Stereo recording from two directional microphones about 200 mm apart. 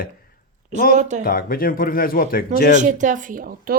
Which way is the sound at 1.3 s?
45° left (ahead or behind).